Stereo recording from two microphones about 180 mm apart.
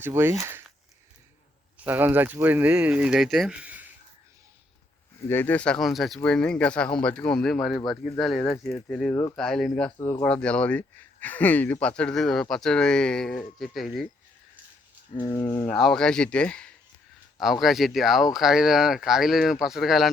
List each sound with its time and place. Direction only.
0.0 s speech: 15° right (ahead or behind)
1.8 s speech: 10° right (ahead or behind)
5.3 s speech: 10° left (ahead or behind)
10.0 s speech: 15° left (ahead or behind)
10.2 s speech: 5° left (ahead or behind)
15.2 s speech: 20° left (ahead or behind)
15.6 s speech: 5° left (ahead or behind)